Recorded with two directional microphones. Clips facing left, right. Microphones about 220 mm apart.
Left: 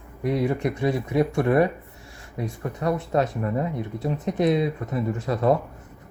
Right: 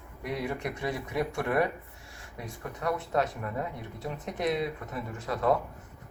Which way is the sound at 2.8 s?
30° left (ahead or behind).